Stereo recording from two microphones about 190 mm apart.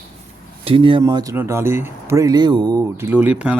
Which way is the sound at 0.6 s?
30° right (ahead or behind).